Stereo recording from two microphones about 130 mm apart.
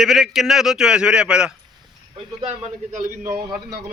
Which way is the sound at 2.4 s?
65° right (ahead or behind).